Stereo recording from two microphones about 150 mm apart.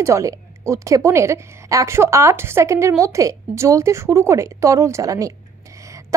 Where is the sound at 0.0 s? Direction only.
20° right (ahead or behind).